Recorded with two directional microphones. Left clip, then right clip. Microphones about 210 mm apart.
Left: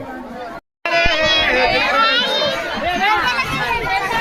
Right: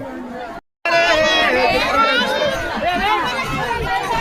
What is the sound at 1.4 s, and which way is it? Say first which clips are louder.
Speech: even; 50° right (ahead or behind).